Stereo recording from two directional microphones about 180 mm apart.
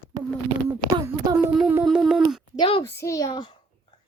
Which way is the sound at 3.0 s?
15° left (ahead or behind).